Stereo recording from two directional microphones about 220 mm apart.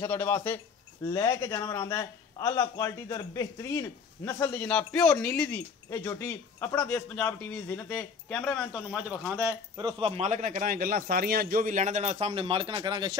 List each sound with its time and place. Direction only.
0.0 s a man's voice: 10° left (ahead or behind)
9.4 s speech: 15° right (ahead or behind)